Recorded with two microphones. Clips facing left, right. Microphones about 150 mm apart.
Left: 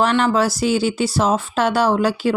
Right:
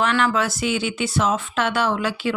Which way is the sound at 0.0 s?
35° left (ahead or behind).